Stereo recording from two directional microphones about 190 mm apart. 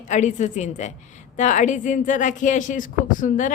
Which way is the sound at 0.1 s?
40° left (ahead or behind).